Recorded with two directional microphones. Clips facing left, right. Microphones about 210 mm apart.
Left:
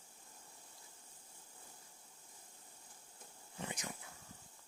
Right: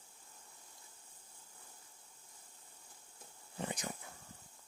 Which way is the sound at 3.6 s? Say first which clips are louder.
Right 4 dB; 35° right (ahead or behind).